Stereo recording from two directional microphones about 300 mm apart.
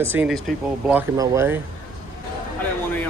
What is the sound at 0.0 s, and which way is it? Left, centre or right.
A man's voice, centre.